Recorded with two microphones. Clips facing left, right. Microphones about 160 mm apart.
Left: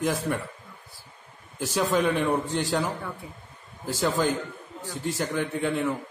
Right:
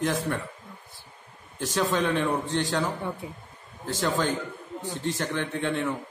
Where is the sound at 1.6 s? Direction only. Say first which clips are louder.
Left 1 dB; 5° left (ahead or behind).